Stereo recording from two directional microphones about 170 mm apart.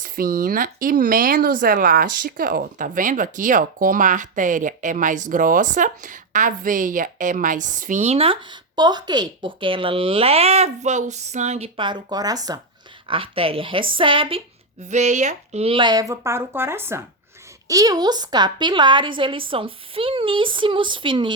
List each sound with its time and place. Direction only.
0.0 s speech: 55° right (ahead or behind)
11.8 s a woman's voice: 25° right (ahead or behind)
14.8 s a woman's voice: 45° right (ahead or behind)